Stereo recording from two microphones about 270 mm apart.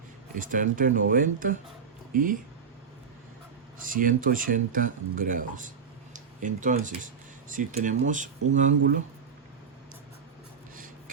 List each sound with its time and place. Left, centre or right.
0.3 s speech: right
3.8 s speech: right
6.1 s a sound: right
7.5 s speech: right